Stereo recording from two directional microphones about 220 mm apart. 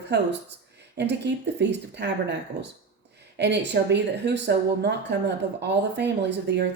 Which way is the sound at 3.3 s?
50° right (ahead or behind).